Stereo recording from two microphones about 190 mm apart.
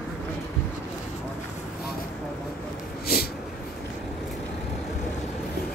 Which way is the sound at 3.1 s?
55° left (ahead or behind).